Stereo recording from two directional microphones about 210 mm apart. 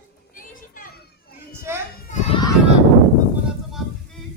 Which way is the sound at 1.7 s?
10° right (ahead or behind).